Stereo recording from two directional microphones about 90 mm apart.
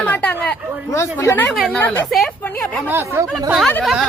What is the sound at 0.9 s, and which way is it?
Speech, 25° left (ahead or behind).